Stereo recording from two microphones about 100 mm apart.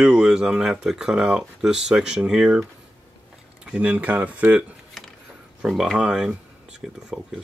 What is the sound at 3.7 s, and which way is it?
Speech, 10° right (ahead or behind).